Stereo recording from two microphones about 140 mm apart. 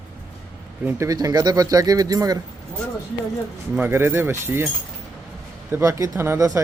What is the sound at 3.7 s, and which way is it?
Speech, 15° right (ahead or behind).